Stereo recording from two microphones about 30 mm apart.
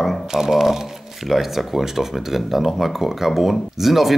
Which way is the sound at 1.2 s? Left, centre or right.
Centre.